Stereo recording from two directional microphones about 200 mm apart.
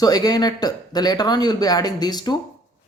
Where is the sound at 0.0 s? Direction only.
20° left (ahead or behind).